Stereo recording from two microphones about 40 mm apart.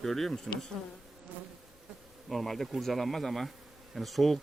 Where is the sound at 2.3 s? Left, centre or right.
Centre.